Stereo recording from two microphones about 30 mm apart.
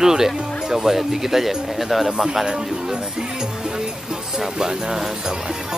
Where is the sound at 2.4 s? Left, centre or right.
Right.